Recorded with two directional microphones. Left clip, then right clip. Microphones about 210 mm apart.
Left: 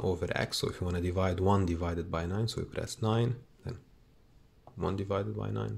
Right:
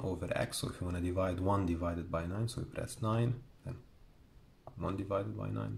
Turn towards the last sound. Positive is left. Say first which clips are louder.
# left 5 dB
turn(degrees=35)  # may be behind; listen again after turning